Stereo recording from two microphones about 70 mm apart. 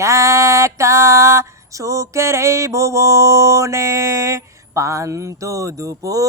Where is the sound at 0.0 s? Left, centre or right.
Right.